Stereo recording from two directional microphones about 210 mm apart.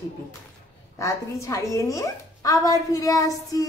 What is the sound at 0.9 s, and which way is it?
A woman's voice, 15° left (ahead or behind).